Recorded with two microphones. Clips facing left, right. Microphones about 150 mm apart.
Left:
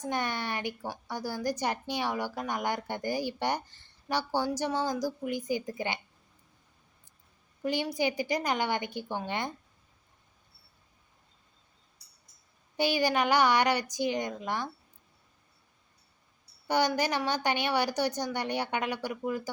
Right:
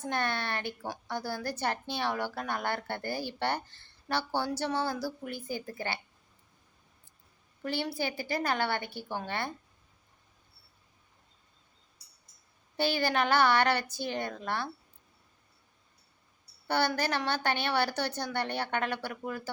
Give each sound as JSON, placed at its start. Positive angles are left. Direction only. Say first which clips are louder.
{"t": 0.0, "sound": "a woman's voice", "louder": "even", "side_deg": 15}
{"t": 7.6, "sound": "a woman's voice", "louder": "left 4 dB", "side_deg": 15}
{"t": 12.7, "sound": "a woman's voice", "louder": "left 2 dB", "side_deg": 15}
{"t": 16.6, "sound": "a woman's voice", "louder": "left 2 dB", "side_deg": 15}